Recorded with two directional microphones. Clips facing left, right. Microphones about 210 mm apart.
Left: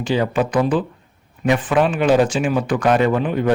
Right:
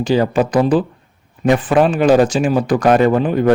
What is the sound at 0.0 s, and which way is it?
Speech, 40° right (ahead or behind).